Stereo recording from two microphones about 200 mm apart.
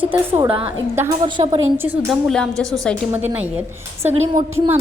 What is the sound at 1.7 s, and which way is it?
Speech, 10° right (ahead or behind).